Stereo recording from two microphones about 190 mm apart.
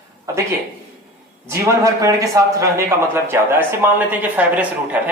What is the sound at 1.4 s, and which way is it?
Speech, 15° right (ahead or behind).